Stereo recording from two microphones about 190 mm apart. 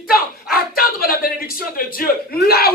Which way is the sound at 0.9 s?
50° left (ahead or behind).